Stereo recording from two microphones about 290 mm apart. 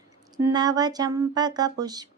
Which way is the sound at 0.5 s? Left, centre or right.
Centre.